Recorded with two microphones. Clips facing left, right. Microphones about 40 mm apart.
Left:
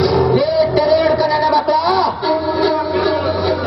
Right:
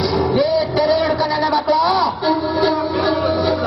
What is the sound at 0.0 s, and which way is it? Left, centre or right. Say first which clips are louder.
Music: left 3 dB; centre.